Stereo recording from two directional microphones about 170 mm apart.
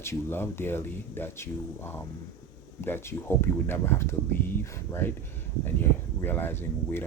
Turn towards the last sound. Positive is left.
turn(degrees=15)  # may be behind; listen again after turning